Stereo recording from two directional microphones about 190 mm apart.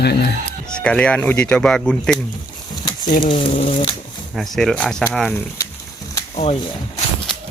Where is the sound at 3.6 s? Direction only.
40° left (ahead or behind).